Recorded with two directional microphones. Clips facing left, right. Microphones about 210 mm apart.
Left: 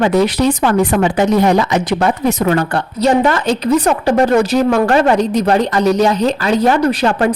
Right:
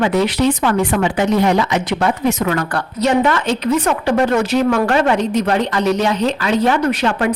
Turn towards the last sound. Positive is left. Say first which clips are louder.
# left 3 dB
turn(degrees=35)  # may be behind; listen again after turning